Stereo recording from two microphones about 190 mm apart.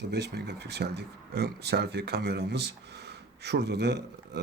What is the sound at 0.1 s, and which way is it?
Speech, 60° right (ahead or behind).